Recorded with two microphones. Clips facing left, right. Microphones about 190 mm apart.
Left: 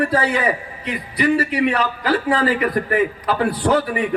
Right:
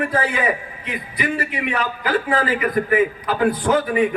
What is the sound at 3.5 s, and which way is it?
Speech, 35° left (ahead or behind).